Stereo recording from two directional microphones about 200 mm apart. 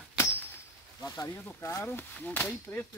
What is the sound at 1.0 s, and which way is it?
Speech, 15° left (ahead or behind).